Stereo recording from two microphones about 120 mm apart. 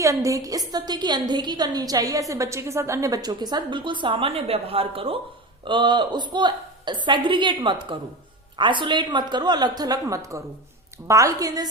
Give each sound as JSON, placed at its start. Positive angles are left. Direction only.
{"t": 0.0, "sound": "a woman's voice", "side_deg": -25}